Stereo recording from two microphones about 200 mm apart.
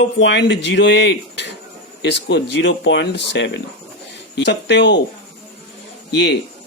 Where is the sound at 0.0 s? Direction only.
65° left (ahead or behind).